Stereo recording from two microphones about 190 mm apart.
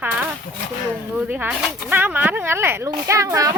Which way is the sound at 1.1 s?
10° right (ahead or behind).